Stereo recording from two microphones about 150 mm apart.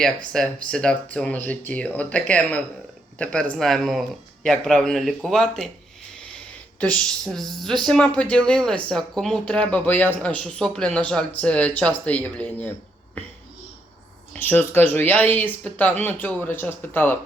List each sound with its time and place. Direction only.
0.3 s speech: 5° left (ahead or behind)
6.9 s speech: 5° left (ahead or behind)
14.3 s speech: 10° left (ahead or behind)